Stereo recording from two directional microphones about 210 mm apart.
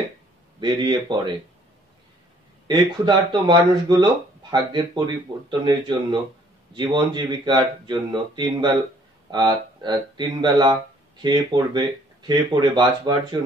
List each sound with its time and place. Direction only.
0.6 s speech: 20° right (ahead or behind)
2.7 s speech: 20° right (ahead or behind)